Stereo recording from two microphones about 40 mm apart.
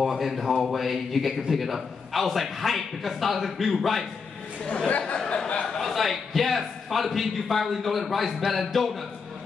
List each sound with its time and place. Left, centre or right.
0.1 s a man's voice: centre
4.8 s a sound: left
5.7 s a man's voice: centre